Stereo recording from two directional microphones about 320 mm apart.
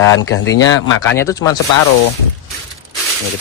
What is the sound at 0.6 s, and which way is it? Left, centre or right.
Speech, centre.